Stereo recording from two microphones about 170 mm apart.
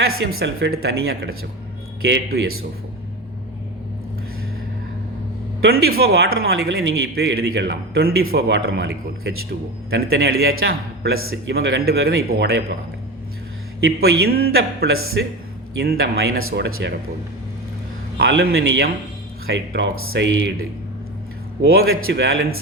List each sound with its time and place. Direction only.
0.2 s a man's voice: 80° right
2.0 s speech: 90° right
5.6 s a man's voice: 65° right (ahead or behind)
13.8 s a man's voice: 70° right (ahead or behind)
18.2 s a man's voice: 80° right
19.5 s speech: 90° right
21.7 s a man's voice: 70° right (ahead or behind)